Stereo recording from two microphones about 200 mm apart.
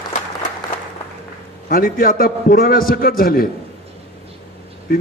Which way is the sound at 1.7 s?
45° left (ahead or behind).